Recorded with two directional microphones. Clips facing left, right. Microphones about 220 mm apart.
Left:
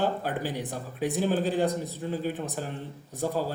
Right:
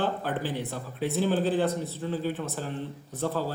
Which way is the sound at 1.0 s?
15° left (ahead or behind).